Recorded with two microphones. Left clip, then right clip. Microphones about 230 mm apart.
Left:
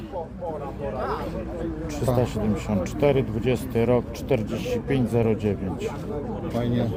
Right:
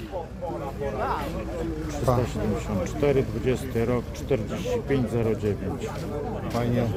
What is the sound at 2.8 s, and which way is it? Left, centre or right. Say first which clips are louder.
Speech: left 2 dB; left.